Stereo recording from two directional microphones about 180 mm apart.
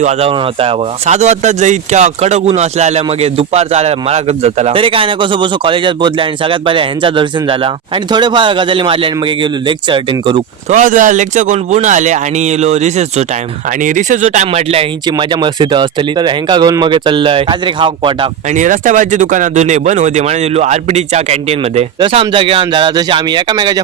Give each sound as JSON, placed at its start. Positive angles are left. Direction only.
{"t": 0.0, "sound": "speech", "side_deg": -35}
{"t": 10.7, "sound": "speech", "side_deg": -45}
{"t": 18.5, "sound": "speech", "side_deg": -45}